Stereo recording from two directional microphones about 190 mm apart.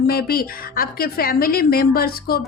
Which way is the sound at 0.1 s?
50° left (ahead or behind).